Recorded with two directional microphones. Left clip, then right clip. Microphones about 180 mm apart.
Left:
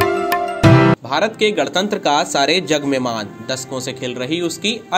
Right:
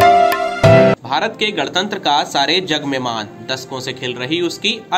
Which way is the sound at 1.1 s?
50° left (ahead or behind).